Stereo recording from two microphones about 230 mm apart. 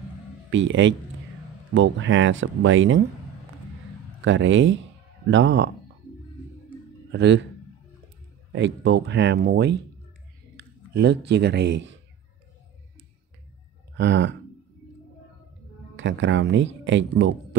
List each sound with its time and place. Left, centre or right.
0.5 s speech: right
4.2 s speech: right
7.1 s speech: right
8.5 s speech: right
13.9 s speech: right
16.0 s speech: right